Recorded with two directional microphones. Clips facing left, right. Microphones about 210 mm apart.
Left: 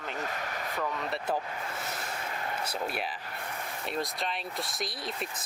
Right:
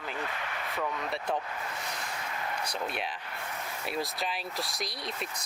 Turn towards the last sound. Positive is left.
turn(degrees=0)  # may be behind; listen again after turning